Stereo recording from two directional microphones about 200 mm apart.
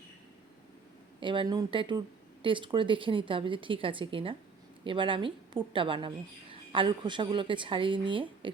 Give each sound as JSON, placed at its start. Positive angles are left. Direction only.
{"t": 1.2, "sound": "a woman's voice", "side_deg": -25}